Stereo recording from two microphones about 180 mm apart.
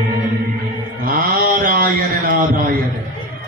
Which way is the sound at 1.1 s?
50° right (ahead or behind).